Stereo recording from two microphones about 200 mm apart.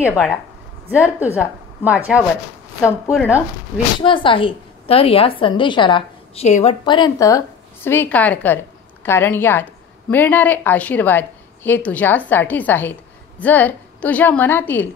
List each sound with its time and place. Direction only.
0.8 s a woman's voice: 10° right (ahead or behind)
4.0 s a woman's voice: 25° left (ahead or behind); by 14.9 s 10° left (ahead or behind)